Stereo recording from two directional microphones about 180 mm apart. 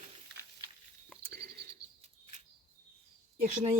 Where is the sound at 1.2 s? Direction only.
60° right (ahead or behind).